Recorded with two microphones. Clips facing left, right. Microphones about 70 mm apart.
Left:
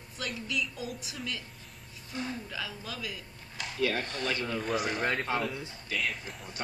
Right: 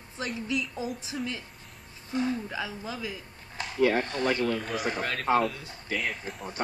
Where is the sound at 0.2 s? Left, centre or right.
Right.